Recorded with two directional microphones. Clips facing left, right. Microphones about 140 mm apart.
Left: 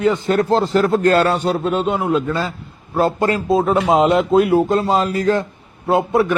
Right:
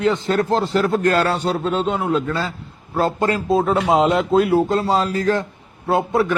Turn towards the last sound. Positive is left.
turn(degrees=15)  # may be behind; listen again after turning